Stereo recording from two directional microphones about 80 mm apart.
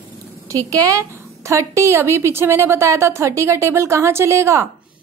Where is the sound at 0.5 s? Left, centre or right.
Right.